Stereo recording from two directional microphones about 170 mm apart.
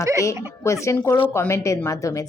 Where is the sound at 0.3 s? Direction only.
15° left (ahead or behind).